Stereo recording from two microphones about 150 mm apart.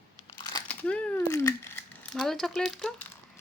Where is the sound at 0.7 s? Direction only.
10° left (ahead or behind).